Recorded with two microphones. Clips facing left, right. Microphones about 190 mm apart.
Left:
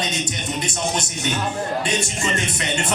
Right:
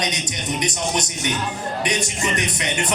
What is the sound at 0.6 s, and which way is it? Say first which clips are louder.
Speech: right 1 dB; 20° right (ahead or behind).